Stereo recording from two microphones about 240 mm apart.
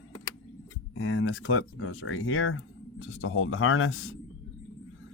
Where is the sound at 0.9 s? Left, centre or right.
Left.